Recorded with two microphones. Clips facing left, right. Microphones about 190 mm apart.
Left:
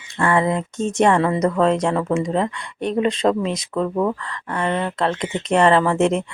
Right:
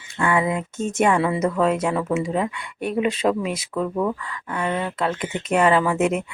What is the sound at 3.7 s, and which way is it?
Speech, 30° left (ahead or behind).